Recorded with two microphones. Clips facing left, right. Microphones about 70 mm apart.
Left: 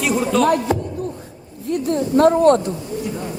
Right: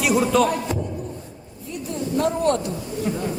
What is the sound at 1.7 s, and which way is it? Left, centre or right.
A woman's voice, left.